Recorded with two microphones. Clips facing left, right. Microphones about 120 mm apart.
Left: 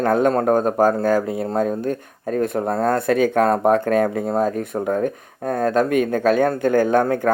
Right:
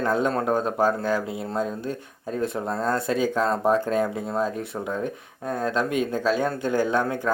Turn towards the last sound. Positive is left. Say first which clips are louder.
# left 6 dB
turn(degrees=50)  # may be behind; listen again after turning